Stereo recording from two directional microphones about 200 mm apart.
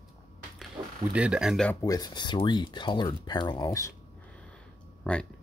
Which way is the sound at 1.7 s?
15° left (ahead or behind).